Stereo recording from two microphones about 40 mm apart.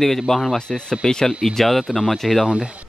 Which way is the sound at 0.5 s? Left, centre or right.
Centre.